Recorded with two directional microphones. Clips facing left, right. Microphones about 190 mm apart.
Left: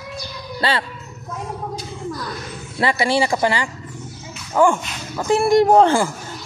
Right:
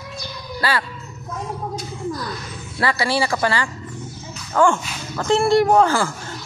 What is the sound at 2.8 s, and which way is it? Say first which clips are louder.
Speech: left 2 dB; 20° left (ahead or behind).